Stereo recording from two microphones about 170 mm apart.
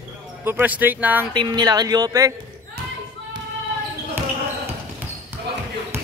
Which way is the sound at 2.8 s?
65° right (ahead or behind).